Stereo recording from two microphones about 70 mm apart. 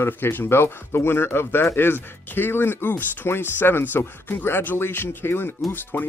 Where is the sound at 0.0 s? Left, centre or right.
Left.